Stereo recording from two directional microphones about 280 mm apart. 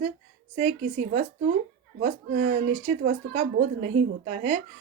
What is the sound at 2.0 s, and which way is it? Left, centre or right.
A woman's voice, right.